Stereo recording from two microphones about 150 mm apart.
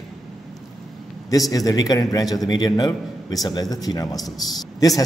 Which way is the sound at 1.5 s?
25° left (ahead or behind).